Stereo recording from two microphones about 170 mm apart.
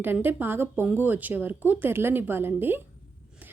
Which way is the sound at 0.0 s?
10° right (ahead or behind).